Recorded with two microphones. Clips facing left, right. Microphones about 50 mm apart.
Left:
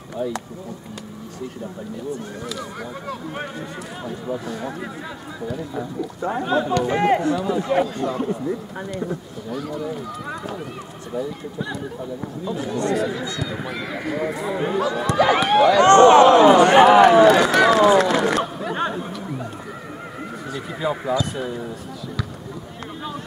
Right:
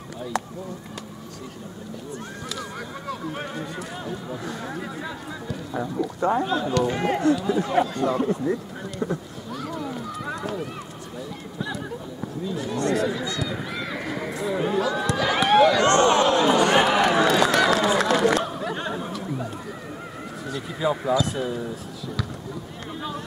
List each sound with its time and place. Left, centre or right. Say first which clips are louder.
3.1 s speech: right 1 dB; centre
6.9 s speech: left 6 dB; centre
7.2 s speech: even; centre
11.6 s speech: left 1 dB; centre
15.4 s a sound: right 2 dB; centre
15.8 s a sound: left 8 dB; left
16.8 s run: left 9 dB; centre
18.9 s chatter: left 1 dB; centre
20.5 s speech: even; centre